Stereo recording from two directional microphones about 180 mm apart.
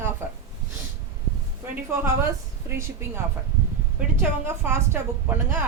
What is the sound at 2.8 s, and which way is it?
A woman's voice, 15° right (ahead or behind).